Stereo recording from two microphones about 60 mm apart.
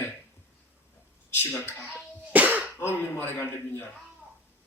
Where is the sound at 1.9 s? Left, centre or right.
Right.